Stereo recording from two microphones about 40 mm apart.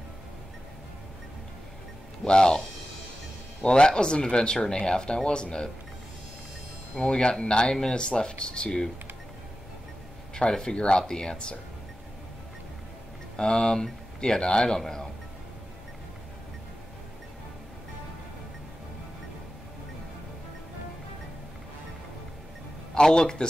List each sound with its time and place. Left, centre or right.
2.2 s speech: left
3.6 s speech: left
7.0 s speech: left
10.3 s speech: left
13.4 s a man's voice: centre
22.9 s speech: centre